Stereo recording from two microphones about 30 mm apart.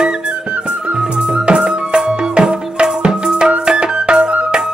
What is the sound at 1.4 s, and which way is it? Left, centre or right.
Music, right.